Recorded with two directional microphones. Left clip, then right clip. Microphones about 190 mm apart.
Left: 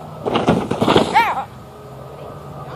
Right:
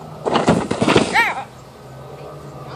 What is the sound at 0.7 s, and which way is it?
Horse, 20° right (ahead or behind).